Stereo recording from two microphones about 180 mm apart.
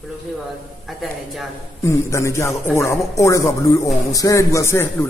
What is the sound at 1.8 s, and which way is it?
Speech, 15° left (ahead or behind).